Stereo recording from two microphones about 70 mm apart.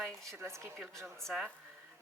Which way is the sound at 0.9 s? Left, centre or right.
Centre.